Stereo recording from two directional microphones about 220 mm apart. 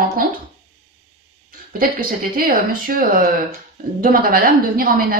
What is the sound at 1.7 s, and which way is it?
A woman's voice, 40° right (ahead or behind).